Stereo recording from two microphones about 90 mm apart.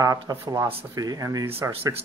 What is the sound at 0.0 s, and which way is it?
Speech, 40° right (ahead or behind).